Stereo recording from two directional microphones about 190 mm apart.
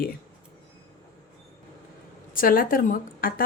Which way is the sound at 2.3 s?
50° left (ahead or behind).